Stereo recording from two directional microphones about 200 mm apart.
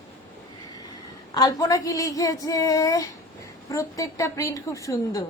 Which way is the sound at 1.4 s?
20° left (ahead or behind).